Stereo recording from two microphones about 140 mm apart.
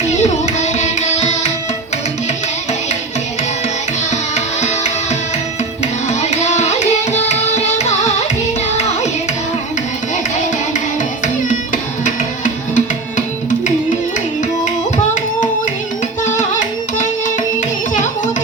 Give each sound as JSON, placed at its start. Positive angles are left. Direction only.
{"t": 0.1, "sound": "carnatic music", "side_deg": 55}
{"t": 4.1, "sound": "music", "side_deg": 55}
{"t": 11.4, "sound": "music", "side_deg": 65}
{"t": 16.4, "sound": "music", "side_deg": 60}